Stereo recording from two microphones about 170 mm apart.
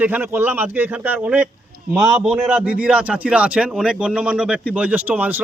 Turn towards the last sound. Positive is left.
turn(degrees=-10)  # may be behind; listen again after turning